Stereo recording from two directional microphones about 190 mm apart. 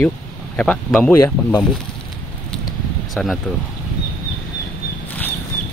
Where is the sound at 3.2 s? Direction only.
5° left (ahead or behind).